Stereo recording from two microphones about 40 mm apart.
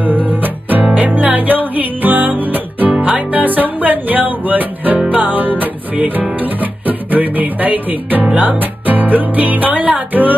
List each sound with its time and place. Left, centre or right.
0.4 s music: right